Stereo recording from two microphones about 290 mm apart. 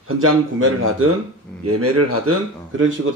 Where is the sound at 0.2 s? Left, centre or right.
Right.